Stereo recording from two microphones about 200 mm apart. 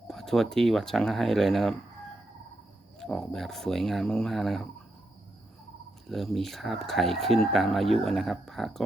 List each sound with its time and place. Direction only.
0.1 s speech: centre (ahead or behind)
3.0 s speech: centre (ahead or behind)
6.1 s speech: centre (ahead or behind)